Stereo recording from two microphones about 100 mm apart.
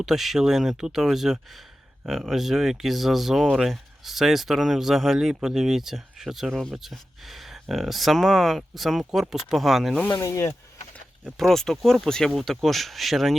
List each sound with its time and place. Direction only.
0.0 s speech: centre (ahead or behind)
10.2 s speech: 30° left (ahead or behind)
11.3 s speech: centre (ahead or behind)